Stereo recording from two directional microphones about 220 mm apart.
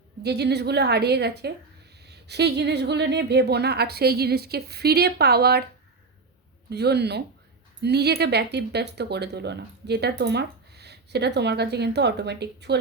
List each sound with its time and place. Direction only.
0.2 s speech: 50° right (ahead or behind)
6.7 s speech: 50° right (ahead or behind)